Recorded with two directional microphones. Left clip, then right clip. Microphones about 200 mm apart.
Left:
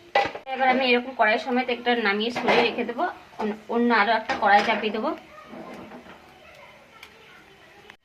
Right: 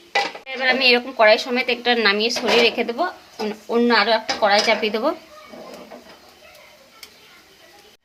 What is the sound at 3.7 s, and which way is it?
A woman's voice, 60° right (ahead or behind).